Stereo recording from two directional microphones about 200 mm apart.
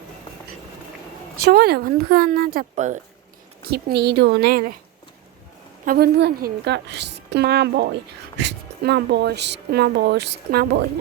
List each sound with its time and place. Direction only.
1.5 s speech: 50° right (ahead or behind)
3.7 s speech: 55° right (ahead or behind)
5.8 s speech: 50° right (ahead or behind)